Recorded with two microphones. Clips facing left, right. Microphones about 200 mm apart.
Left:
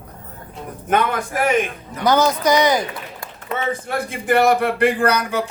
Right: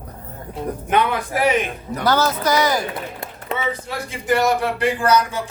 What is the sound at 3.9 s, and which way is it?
Speech, 55° left (ahead or behind).